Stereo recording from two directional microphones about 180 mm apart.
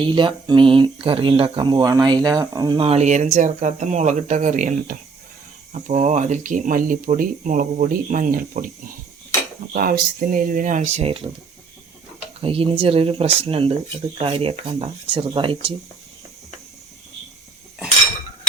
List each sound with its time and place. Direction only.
0.0 s speech: 25° right (ahead or behind)
12.4 s speech: 30° right (ahead or behind)